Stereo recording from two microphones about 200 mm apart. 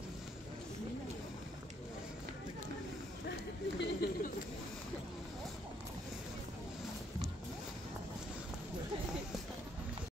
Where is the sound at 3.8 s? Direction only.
55° left (ahead or behind).